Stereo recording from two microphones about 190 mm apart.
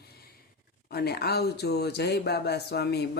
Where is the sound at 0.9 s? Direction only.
55° left (ahead or behind).